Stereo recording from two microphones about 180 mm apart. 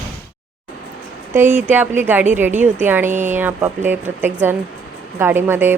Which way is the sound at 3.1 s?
45° right (ahead or behind).